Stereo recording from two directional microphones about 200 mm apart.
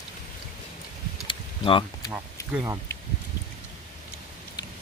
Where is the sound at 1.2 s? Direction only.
25° left (ahead or behind).